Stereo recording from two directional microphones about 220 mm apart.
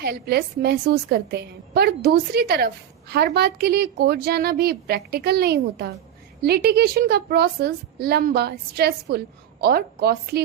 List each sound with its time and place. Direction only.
0.0 s a woman's voice: 45° right (ahead or behind)